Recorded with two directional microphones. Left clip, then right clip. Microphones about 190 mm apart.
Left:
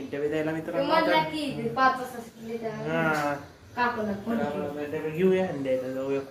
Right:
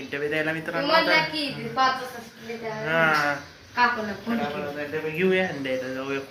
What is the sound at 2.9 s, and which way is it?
Speech, 15° left (ahead or behind).